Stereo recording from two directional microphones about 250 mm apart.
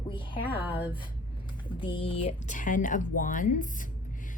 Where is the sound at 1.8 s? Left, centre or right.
Left.